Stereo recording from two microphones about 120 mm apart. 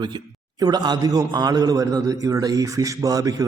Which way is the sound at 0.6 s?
35° right (ahead or behind).